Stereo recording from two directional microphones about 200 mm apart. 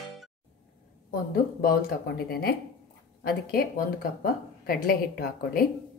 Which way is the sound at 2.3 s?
50° left (ahead or behind).